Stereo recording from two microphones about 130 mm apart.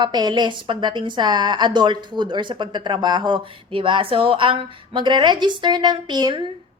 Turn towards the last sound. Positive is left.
turn(degrees=-35)  # may be behind; listen again after turning